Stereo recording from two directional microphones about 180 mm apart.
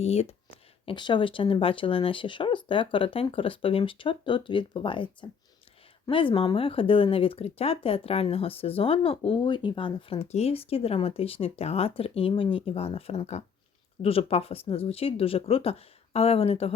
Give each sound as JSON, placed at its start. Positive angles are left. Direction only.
{"t": 0.0, "sound": "speech", "side_deg": 35}